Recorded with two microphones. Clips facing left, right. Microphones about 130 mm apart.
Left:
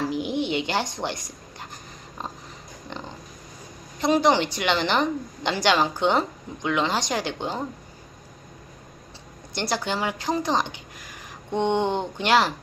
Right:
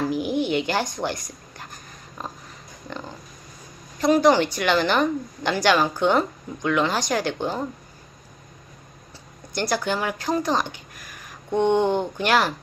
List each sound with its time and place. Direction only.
0.1 s a sound: 20° left (ahead or behind)
2.9 s pig: 20° left (ahead or behind)
4.0 s speech: 20° left (ahead or behind)
9.6 s speech: 20° left (ahead or behind)